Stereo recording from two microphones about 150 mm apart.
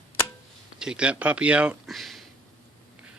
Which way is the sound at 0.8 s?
5° right (ahead or behind).